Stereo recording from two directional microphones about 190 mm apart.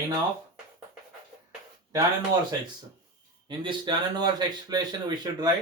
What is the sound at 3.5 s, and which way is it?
Speech, 25° right (ahead or behind).